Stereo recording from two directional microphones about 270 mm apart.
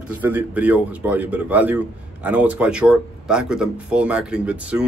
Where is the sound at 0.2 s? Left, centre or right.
Centre.